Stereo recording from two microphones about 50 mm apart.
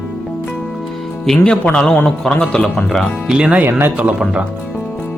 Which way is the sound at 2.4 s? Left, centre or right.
Centre.